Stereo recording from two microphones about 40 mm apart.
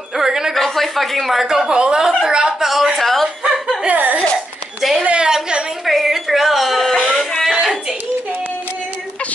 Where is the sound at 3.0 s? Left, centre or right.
Centre.